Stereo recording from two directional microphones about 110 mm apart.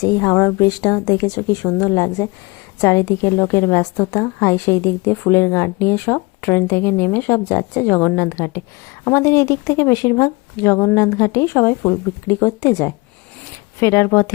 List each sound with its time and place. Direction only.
0.0 s a woman's voice: 35° left (ahead or behind)